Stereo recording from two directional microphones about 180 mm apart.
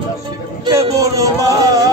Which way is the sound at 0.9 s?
20° right (ahead or behind).